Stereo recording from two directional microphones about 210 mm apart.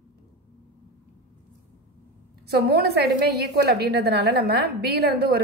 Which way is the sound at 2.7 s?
50° right (ahead or behind).